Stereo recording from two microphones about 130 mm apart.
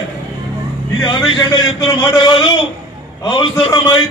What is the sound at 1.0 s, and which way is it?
A man's voice, 35° left (ahead or behind).